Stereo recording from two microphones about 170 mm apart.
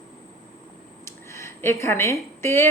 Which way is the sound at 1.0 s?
15° left (ahead or behind).